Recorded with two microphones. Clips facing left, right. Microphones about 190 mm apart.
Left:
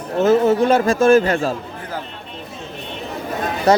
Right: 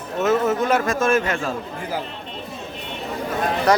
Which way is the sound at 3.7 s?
25° left (ahead or behind).